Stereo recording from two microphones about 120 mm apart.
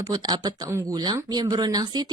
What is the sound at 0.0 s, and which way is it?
A woman's voice, 35° right (ahead or behind).